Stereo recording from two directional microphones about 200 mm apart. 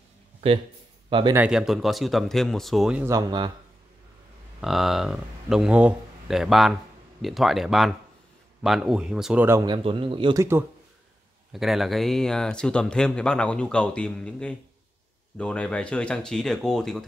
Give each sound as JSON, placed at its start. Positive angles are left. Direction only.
{"t": 0.4, "sound": "speech", "side_deg": -30}
{"t": 1.3, "sound": "speech", "side_deg": -5}
{"t": 3.1, "sound": "speech", "side_deg": -20}
{"t": 4.6, "sound": "a man's voice", "side_deg": 0}
{"t": 11.5, "sound": "speech", "side_deg": 0}